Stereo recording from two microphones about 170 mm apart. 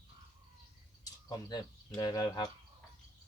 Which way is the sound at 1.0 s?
20° left (ahead or behind).